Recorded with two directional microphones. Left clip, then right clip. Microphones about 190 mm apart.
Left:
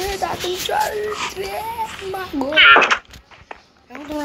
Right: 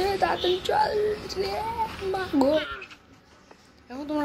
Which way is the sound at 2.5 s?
45° right (ahead or behind).